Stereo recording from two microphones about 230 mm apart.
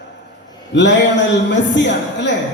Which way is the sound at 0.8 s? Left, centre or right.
Left.